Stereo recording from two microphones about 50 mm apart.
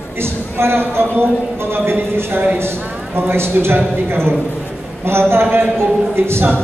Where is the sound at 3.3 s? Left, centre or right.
Right.